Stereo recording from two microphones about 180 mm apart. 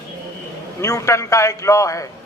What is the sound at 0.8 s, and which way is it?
A man's voice, 15° left (ahead or behind).